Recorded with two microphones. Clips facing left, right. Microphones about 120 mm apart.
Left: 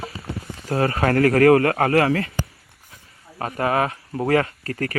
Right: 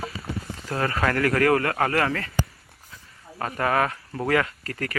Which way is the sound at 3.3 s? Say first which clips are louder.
Left 2 dB; 25° left (ahead or behind).